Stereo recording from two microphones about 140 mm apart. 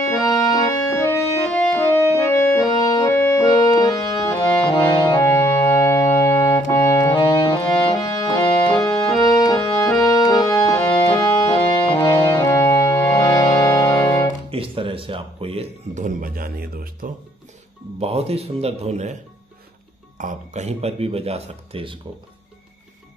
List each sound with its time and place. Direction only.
0.0 s organ: 25° left (ahead or behind)
5.1 s organ: 20° left (ahead or behind)
7.2 s accordion: 35° left (ahead or behind)
12.4 s music: 20° left (ahead or behind)
14.5 s music: 40° right (ahead or behind)
16.0 s a sound: 85° right
17.9 s speech: 45° right (ahead or behind)
20.2 s speech: 60° right (ahead or behind); by 21.9 s 45° right (ahead or behind)